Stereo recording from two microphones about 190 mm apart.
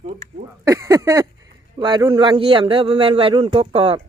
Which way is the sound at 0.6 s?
15° right (ahead or behind).